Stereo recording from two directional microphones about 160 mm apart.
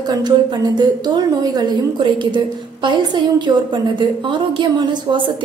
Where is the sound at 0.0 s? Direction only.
25° right (ahead or behind).